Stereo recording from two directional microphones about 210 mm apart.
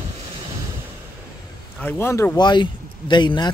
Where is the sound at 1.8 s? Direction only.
10° left (ahead or behind).